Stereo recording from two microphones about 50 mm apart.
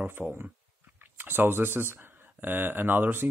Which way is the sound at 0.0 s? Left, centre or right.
Right.